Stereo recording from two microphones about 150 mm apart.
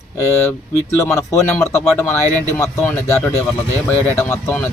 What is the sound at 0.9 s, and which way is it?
A man's voice, 20° left (ahead or behind).